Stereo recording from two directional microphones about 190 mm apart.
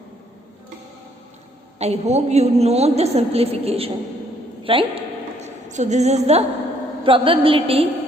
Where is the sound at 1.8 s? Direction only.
35° right (ahead or behind).